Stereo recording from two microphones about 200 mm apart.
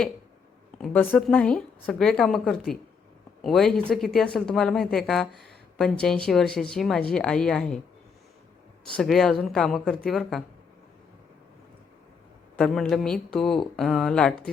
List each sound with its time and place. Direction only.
0.8 s speech: 5° left (ahead or behind)
8.8 s speech: centre (ahead or behind)
12.5 s speech: 5° left (ahead or behind)